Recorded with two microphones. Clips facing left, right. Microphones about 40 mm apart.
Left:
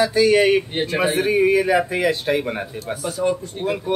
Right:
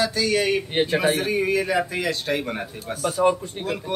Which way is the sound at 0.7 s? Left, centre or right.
Centre.